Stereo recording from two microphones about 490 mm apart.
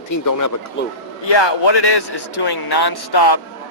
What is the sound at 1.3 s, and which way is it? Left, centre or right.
A man's voice, left.